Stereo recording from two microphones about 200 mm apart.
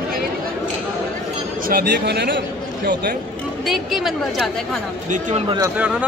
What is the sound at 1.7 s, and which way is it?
A man's voice, 55° right (ahead or behind).